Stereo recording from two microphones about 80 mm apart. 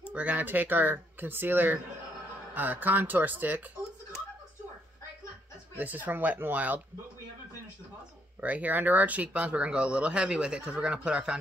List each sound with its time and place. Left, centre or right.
0.1 s speech: centre
5.8 s speech: right
8.4 s speech: centre